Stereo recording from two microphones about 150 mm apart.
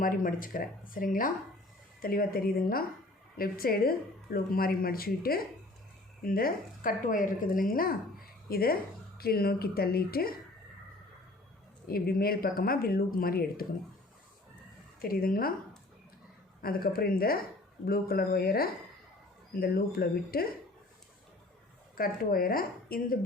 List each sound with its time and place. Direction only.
0.0 s speech: 65° left (ahead or behind)
2.0 s speech: 75° left (ahead or behind)
11.9 s speech: 85° left
15.0 s speech: 80° left
16.6 s speech: 85° left
21.9 s speech: 75° left (ahead or behind)